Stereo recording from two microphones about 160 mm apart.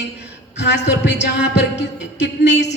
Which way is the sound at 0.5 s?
90° left.